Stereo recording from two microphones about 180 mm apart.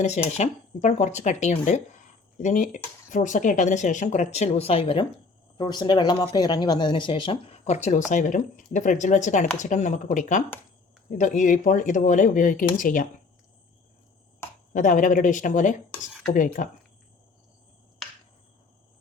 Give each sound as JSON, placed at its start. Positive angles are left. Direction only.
{"t": 0.0, "sound": "speech", "side_deg": 35}
{"t": 14.7, "sound": "speech", "side_deg": 45}